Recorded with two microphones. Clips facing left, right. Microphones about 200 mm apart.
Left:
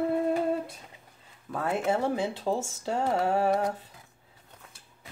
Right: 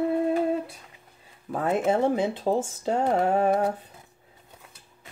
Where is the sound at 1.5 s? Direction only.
20° right (ahead or behind).